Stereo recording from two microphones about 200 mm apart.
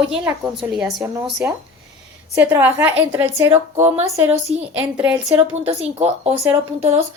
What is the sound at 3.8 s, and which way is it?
Speech, 30° right (ahead or behind).